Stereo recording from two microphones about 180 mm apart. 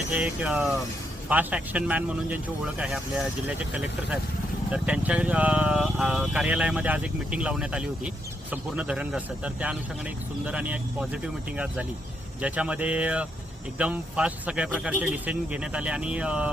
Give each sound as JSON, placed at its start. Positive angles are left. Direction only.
{"t": 0.1, "sound": "speech", "side_deg": -5}